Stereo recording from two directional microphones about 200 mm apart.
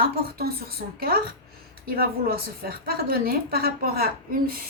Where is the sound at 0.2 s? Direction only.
50° right (ahead or behind).